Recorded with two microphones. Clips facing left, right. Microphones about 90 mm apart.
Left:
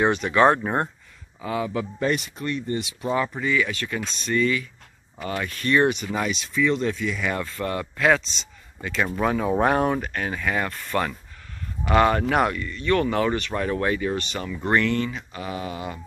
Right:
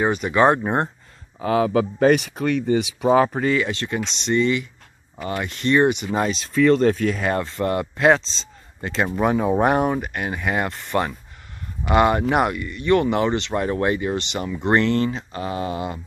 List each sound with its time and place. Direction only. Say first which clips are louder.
0.0 s speech: even; 5° right (ahead or behind)
0.3 s speech: right 2 dB; 15° right (ahead or behind)
1.4 s speech: right 8 dB; 65° right (ahead or behind)
3.5 s speech: right 2 dB; 30° right (ahead or behind)
6.1 s speech: right 5 dB; 35° right (ahead or behind)
7.2 s speech: right 4 dB; 40° right (ahead or behind)
7.4 s speech: right 5 dB; 25° right (ahead or behind)
8.8 s speech: right 2 dB; 30° right (ahead or behind)
9.1 s speech: right 4 dB; 15° right (ahead or behind)